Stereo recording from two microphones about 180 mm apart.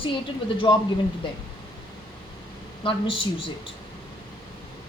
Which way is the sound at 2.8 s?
30° left (ahead or behind).